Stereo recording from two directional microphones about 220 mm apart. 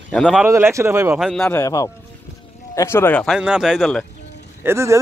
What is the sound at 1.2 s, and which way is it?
Speech, centre (ahead or behind).